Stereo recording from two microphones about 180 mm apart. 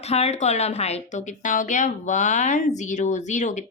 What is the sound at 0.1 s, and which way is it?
A woman's voice, 35° left (ahead or behind).